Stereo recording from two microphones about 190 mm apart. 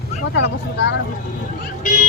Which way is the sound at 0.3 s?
65° left (ahead or behind).